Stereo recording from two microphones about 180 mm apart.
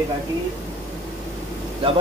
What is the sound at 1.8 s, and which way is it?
Speech, 30° right (ahead or behind).